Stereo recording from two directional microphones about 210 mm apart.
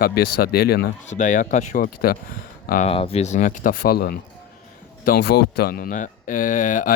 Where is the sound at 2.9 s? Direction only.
25° left (ahead or behind).